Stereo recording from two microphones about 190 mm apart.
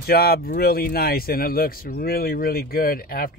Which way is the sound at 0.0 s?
55° left (ahead or behind).